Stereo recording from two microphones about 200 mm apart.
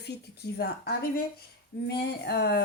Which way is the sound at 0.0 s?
55° left (ahead or behind).